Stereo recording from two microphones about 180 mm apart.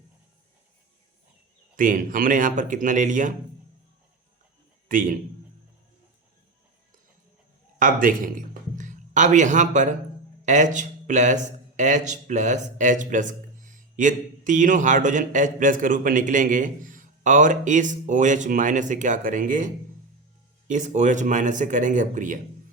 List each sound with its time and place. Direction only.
1.7 s a man's voice: 50° right (ahead or behind)
4.9 s a man's voice: 50° right (ahead or behind)
7.8 s a man's voice: 50° right (ahead or behind)